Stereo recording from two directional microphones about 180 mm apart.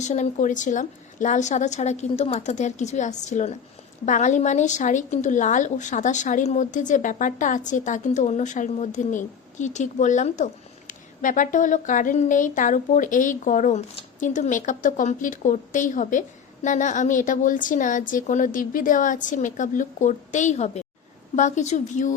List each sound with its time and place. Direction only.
0.0 s a woman's voice: 40° left (ahead or behind)